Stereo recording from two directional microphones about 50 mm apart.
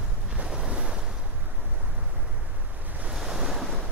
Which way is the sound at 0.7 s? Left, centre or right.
Right.